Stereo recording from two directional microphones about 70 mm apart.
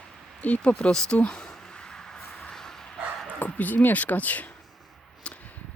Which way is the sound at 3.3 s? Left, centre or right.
Left.